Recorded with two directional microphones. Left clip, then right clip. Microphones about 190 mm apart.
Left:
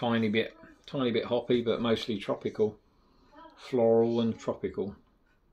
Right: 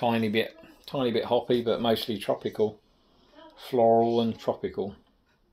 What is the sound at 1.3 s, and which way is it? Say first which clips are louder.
Speech: right 4 dB; 15° left (ahead or behind).